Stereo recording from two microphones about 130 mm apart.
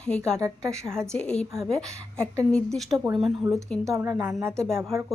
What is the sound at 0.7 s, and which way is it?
Speech, 5° left (ahead or behind).